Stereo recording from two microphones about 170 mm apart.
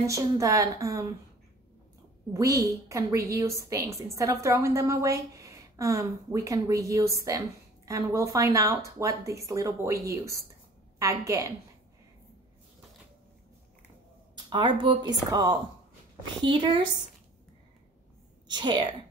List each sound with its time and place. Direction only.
0.0 s a woman's voice: 20° right (ahead or behind)
2.3 s a woman's voice: 20° right (ahead or behind)
14.3 s a woman's voice: 25° right (ahead or behind)
18.5 s a woman's voice: 25° right (ahead or behind)